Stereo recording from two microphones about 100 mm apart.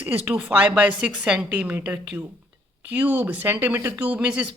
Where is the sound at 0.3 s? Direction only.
15° right (ahead or behind).